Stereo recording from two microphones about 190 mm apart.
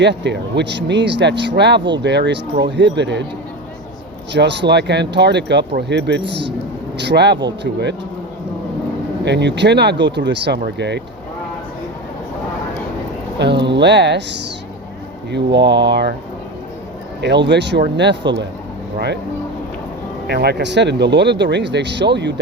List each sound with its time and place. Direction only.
0.0 s speech: 65° right (ahead or behind)
4.3 s speech: 65° right (ahead or behind)
9.2 s speech: 65° right (ahead or behind)
13.4 s speech: 65° right (ahead or behind)
17.2 s speech: 65° right (ahead or behind)
20.2 s speech: 60° right (ahead or behind)